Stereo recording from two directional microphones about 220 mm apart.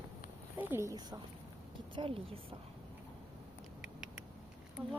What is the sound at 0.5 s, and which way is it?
A woman's voice, 10° right (ahead or behind).